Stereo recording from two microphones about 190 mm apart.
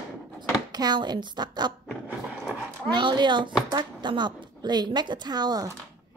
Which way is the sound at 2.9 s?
25° right (ahead or behind).